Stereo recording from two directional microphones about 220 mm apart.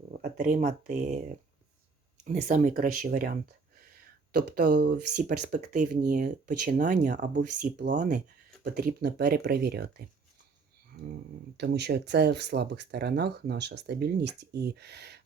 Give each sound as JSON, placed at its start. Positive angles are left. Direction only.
{"t": 0.3, "sound": "speech", "side_deg": -30}
{"t": 2.2, "sound": "speech", "side_deg": -35}
{"t": 7.3, "sound": "speech", "side_deg": -50}
{"t": 7.9, "sound": "speech", "side_deg": -35}
{"t": 11.5, "sound": "speech", "side_deg": -50}